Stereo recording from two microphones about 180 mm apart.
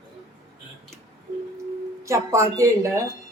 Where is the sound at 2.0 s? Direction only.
15° right (ahead or behind).